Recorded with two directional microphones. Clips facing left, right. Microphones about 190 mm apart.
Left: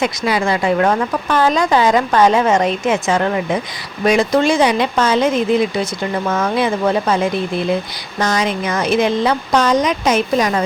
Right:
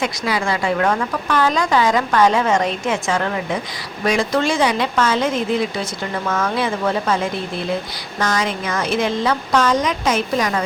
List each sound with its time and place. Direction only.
0.0 s speech: 20° left (ahead or behind)